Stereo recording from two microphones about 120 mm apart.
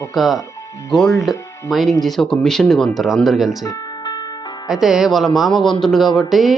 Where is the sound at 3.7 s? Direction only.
35° left (ahead or behind).